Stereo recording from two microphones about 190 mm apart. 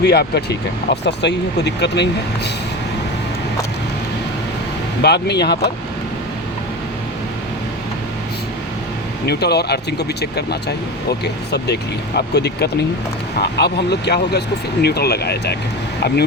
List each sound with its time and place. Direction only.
0.0 s speech: 60° left (ahead or behind)
5.0 s speech: 60° left (ahead or behind)
9.2 s speech: 60° left (ahead or behind)